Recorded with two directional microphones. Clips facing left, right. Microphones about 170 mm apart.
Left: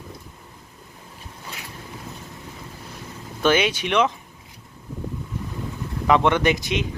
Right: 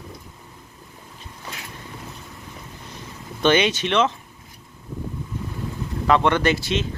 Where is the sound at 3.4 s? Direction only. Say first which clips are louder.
Right 1 dB; 5° left (ahead or behind).